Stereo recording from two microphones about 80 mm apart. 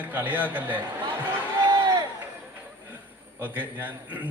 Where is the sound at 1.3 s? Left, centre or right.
Right.